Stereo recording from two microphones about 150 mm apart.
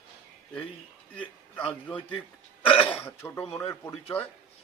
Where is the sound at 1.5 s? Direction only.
10° left (ahead or behind).